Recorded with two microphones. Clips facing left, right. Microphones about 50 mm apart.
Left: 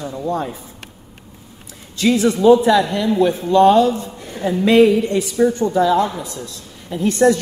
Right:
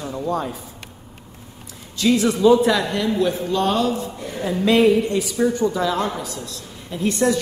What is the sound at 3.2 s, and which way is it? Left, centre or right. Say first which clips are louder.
Speech: left 11 dB; left.